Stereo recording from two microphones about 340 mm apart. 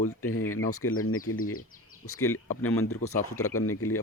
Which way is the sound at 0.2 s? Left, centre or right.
Left.